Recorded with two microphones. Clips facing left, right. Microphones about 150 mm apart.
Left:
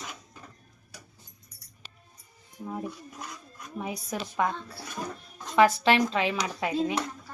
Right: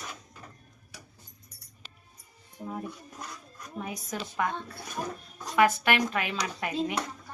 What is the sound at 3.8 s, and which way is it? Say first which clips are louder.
Speech: left 3 dB; 20° left (ahead or behind).